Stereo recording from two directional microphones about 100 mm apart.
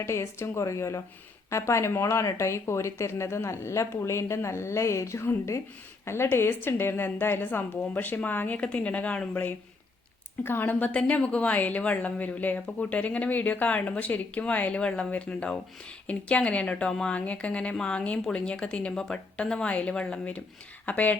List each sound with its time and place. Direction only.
0.0 s a woman's voice: 25° left (ahead or behind)